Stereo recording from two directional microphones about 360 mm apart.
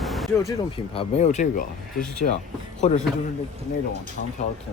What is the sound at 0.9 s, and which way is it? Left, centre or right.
Speech, centre.